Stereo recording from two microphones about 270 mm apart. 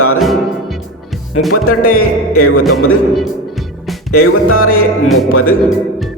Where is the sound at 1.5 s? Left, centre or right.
Left.